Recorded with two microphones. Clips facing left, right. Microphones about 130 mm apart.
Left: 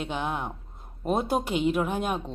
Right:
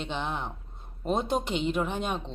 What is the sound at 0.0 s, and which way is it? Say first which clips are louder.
A woman's voice: left 2 dB; 5° left (ahead or behind).